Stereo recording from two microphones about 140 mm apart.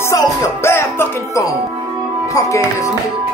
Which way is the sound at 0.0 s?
20° left (ahead or behind).